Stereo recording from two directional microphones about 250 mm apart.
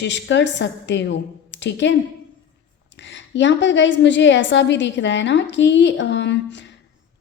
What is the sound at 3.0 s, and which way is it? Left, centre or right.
A woman's voice, left.